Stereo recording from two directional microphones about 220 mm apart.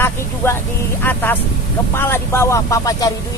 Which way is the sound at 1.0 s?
10° left (ahead or behind).